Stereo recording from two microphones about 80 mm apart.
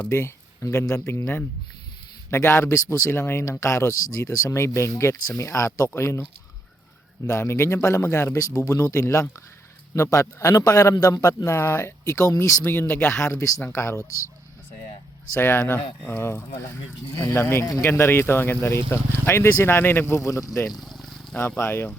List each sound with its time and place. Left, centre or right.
0.1 s a man's voice: left
7.3 s a man's voice: left
12.9 s a man's voice: left
15.3 s a man's voice: left
20.7 s a sound: centre
21.3 s speech: left